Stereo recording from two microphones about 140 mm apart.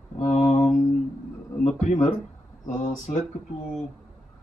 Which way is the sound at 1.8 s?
60° left (ahead or behind).